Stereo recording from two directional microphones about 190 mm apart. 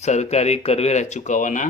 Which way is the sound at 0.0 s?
35° left (ahead or behind).